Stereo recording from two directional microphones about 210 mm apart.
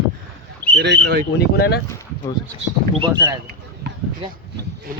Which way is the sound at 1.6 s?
50° left (ahead or behind).